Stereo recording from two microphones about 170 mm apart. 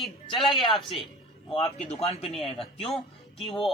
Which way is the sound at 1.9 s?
35° left (ahead or behind).